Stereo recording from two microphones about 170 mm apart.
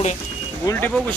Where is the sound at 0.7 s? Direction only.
10° left (ahead or behind).